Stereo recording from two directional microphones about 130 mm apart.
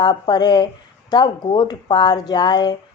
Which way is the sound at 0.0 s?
35° left (ahead or behind).